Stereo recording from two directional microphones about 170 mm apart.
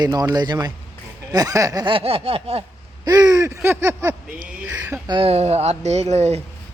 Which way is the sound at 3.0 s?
20° right (ahead or behind).